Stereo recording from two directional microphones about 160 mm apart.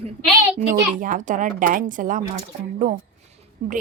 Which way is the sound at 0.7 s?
55° right (ahead or behind).